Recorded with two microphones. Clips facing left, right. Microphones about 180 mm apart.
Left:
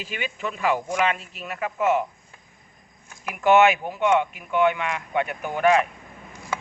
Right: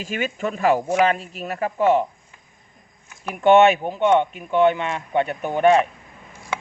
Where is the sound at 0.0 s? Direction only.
45° right (ahead or behind).